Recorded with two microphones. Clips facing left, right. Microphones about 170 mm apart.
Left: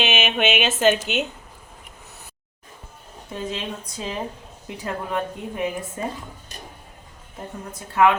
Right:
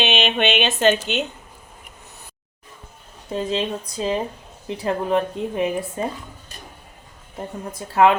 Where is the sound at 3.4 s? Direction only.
30° right (ahead or behind).